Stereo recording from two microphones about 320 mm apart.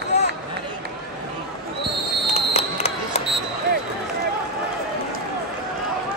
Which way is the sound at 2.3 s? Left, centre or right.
Centre.